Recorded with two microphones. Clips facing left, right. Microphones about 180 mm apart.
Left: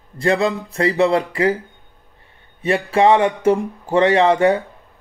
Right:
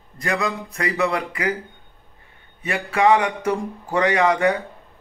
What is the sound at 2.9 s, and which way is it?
Speech, 30° left (ahead or behind).